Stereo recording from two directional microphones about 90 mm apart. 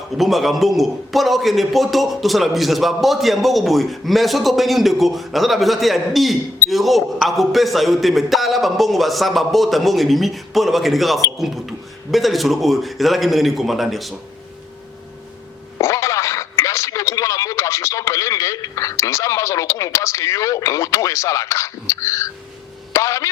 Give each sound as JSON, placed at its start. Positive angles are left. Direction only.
{"t": 0.2, "sound": "a man's voice", "side_deg": 0}
{"t": 15.8, "sound": "speech", "side_deg": 35}